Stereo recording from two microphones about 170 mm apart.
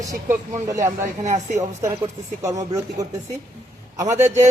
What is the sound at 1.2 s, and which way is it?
Speech, 45° right (ahead or behind).